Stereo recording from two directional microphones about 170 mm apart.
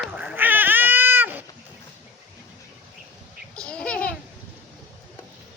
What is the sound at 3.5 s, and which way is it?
Babbling, 5° left (ahead or behind).